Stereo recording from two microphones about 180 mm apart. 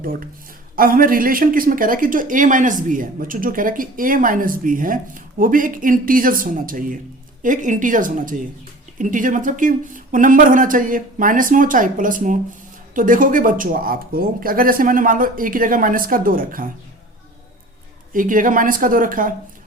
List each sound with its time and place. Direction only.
0.0 s speech: 50° right (ahead or behind)
18.1 s speech: 50° right (ahead or behind)